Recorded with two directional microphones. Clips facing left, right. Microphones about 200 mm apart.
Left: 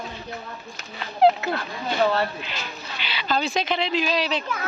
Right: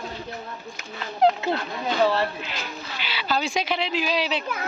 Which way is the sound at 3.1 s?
5° right (ahead or behind).